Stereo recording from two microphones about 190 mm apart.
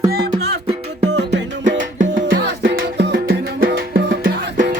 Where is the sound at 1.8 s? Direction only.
45° right (ahead or behind).